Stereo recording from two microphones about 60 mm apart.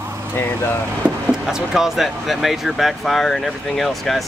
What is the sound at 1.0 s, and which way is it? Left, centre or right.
Speech, right.